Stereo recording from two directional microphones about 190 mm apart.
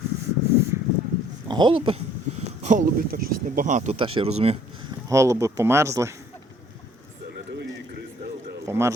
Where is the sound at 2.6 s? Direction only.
45° right (ahead or behind).